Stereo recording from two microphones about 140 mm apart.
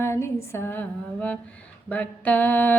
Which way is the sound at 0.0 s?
20° left (ahead or behind).